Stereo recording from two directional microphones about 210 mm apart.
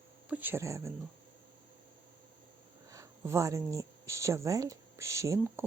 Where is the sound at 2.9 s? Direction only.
15° right (ahead or behind).